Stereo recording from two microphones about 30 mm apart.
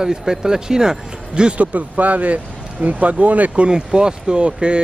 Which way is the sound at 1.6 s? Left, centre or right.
Right.